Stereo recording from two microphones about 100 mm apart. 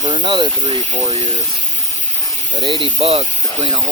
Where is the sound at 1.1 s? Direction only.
90° right.